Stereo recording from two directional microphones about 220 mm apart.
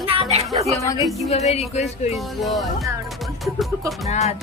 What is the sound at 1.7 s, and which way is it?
Music, 30° left (ahead or behind).